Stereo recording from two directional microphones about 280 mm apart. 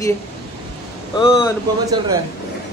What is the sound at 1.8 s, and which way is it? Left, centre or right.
Speech, centre.